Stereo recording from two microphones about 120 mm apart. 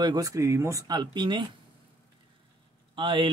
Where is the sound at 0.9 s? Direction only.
40° right (ahead or behind).